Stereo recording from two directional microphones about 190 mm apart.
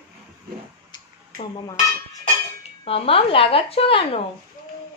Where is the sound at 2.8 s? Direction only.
30° left (ahead or behind).